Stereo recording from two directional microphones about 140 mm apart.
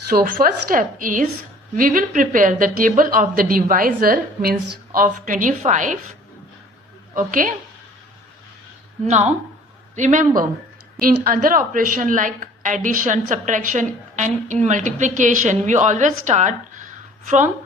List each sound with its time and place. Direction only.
0.1 s a woman's voice: 85° right
4.9 s a woman's voice: 70° right (ahead or behind)
7.3 s a woman's voice: 75° right (ahead or behind)
9.0 s a woman's voice: 55° right (ahead or behind)
11.2 s a woman's voice: 80° right; by 17.5 s 65° right (ahead or behind)